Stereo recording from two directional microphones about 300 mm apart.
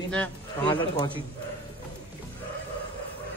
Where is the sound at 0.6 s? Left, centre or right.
Centre.